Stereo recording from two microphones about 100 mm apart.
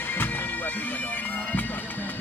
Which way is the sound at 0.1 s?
20° left (ahead or behind).